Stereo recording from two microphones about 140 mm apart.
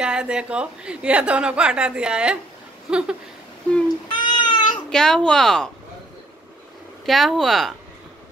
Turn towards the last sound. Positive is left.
turn(degrees=0)  # may be behind; listen again after turning